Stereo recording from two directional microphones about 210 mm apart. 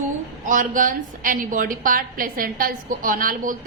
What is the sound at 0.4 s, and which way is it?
A woman's voice, 40° right (ahead or behind).